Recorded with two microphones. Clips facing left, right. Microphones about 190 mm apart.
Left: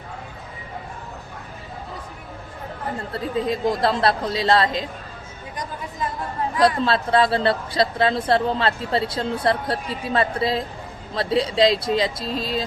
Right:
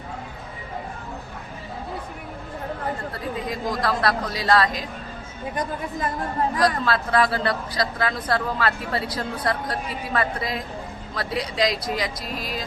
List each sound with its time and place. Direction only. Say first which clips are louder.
3.1 s speech: left 5 dB; 25° left (ahead or behind)
6.6 s speech: left 6 dB; 25° left (ahead or behind)